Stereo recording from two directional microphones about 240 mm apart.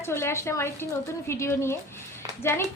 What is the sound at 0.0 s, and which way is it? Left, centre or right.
A woman's voice, centre.